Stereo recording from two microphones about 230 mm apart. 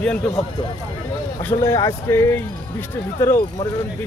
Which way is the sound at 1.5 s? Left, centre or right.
Centre.